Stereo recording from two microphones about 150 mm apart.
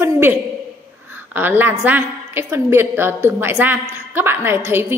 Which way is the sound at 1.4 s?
15° right (ahead or behind).